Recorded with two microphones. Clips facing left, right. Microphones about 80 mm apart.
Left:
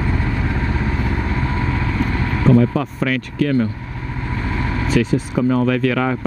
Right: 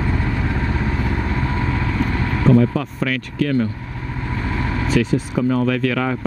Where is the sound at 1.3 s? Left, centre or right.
Left.